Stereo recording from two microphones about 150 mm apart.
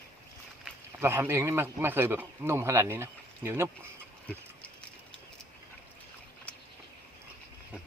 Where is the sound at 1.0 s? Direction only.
15° right (ahead or behind).